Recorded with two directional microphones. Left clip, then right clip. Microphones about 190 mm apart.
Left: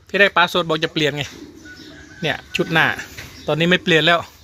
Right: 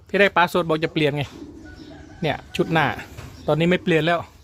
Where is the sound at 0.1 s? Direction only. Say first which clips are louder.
Left 3 dB; 10° right (ahead or behind).